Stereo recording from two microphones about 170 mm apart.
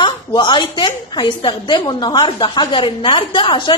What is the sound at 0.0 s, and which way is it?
A woman's voice, 25° left (ahead or behind).